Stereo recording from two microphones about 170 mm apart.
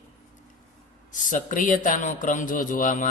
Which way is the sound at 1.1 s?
50° left (ahead or behind).